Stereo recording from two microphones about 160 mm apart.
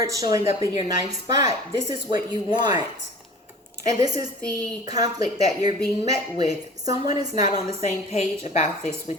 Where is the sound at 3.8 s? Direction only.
20° right (ahead or behind).